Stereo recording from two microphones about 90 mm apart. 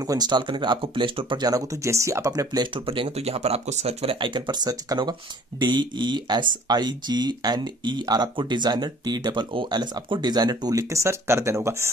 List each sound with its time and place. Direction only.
0.0 s speech: 45° right (ahead or behind); by 1.4 s 70° right (ahead or behind)
1.4 s speech: 45° right (ahead or behind)
2.7 s speech: 75° right (ahead or behind); by 11.9 s 30° right (ahead or behind)